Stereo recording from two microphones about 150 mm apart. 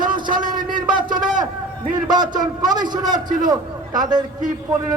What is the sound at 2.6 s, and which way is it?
Speech, 25° right (ahead or behind).